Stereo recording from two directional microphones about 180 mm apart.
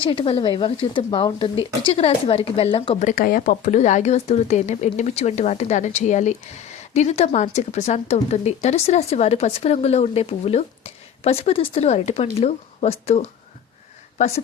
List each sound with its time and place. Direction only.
0.0 s speech: 30° left (ahead or behind)